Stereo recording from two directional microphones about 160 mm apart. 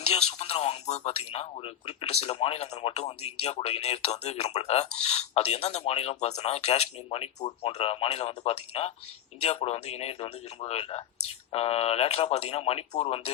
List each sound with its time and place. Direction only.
0.0 s speech: 40° left (ahead or behind)